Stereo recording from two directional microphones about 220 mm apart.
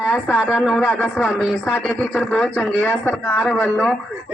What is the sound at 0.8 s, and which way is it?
Speech, 10° left (ahead or behind).